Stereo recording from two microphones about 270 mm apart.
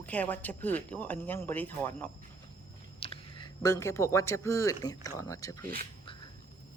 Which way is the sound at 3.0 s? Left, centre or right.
Centre.